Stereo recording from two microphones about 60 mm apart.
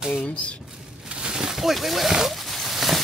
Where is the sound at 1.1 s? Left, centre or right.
Centre.